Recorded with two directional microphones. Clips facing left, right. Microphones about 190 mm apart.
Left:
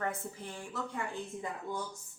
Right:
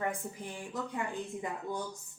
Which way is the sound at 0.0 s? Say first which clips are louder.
Right 1 dB; 15° right (ahead or behind).